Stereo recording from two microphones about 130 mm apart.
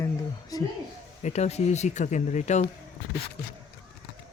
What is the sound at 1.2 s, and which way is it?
Speech, 60° left (ahead or behind).